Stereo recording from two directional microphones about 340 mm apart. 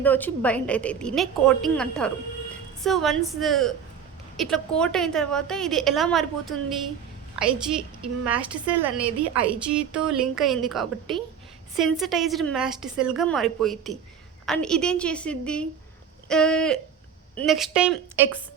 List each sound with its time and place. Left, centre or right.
0.0 s a woman's voice: centre